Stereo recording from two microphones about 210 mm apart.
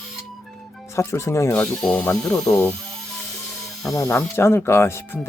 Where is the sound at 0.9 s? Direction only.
15° left (ahead or behind).